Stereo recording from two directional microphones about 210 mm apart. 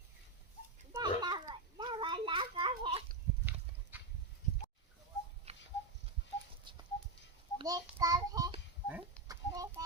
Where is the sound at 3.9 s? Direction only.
10° right (ahead or behind).